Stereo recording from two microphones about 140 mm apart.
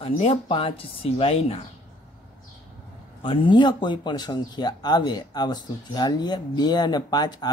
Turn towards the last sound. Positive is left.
turn(degrees=30)  # may be behind; listen again after turning